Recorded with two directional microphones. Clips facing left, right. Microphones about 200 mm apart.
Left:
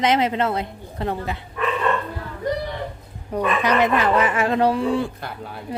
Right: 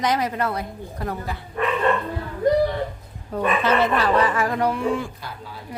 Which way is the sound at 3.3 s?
15° left (ahead or behind).